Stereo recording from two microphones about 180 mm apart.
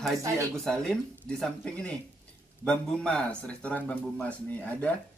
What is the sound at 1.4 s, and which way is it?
Speech, 5° left (ahead or behind).